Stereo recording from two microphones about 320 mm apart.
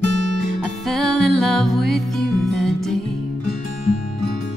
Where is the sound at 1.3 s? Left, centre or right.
Centre.